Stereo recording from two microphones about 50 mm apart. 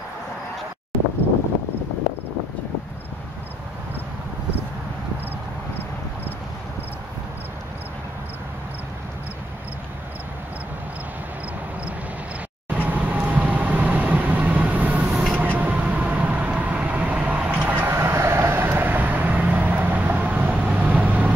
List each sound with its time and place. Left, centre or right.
12.6 s vehicle: right
15.3 s train: right
17.6 s vehicle: right
17.8 s vehicle: right